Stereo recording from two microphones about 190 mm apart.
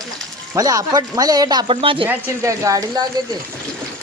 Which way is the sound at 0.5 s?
20° right (ahead or behind).